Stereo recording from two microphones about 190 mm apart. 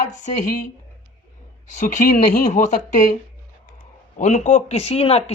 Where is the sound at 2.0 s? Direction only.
45° left (ahead or behind).